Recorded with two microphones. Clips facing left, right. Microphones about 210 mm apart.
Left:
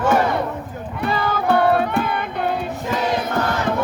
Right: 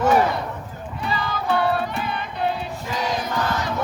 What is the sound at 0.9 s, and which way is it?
Music, 60° left (ahead or behind).